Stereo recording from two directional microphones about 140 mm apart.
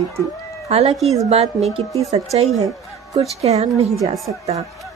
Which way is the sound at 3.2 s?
50° right (ahead or behind).